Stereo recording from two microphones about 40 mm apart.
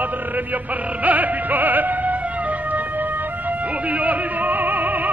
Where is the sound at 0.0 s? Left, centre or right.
Right.